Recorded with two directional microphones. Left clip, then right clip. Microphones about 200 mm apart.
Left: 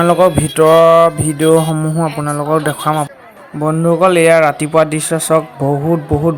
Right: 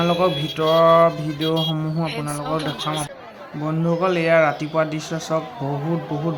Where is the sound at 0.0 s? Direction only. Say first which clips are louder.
Left 9 dB; 35° left (ahead or behind).